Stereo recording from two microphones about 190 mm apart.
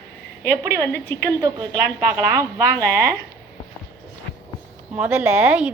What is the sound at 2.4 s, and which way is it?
Speech, 15° right (ahead or behind).